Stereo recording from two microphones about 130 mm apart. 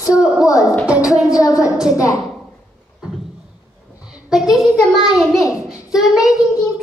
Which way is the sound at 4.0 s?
5° right (ahead or behind).